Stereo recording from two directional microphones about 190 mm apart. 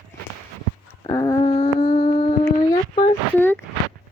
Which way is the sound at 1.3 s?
35° left (ahead or behind).